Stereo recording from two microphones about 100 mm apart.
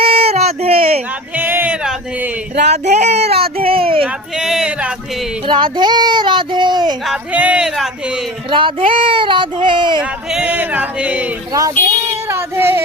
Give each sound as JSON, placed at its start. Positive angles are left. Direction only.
{"t": 0.0, "sound": "a sound", "side_deg": -75}
{"t": 1.4, "sound": "a sound", "side_deg": -20}
{"t": 3.1, "sound": "baby cry", "side_deg": -90}
{"t": 4.0, "sound": "speech", "side_deg": -5}
{"t": 5.5, "sound": "speech", "side_deg": -55}
{"t": 7.1, "sound": "speech", "side_deg": -15}
{"t": 8.4, "sound": "a sound", "side_deg": -60}
{"t": 10.0, "sound": "speech", "side_deg": -10}
{"t": 11.5, "sound": "child singing", "side_deg": -30}